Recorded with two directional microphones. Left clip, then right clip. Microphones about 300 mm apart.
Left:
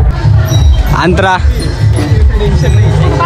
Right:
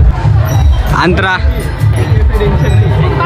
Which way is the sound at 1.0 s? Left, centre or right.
Centre.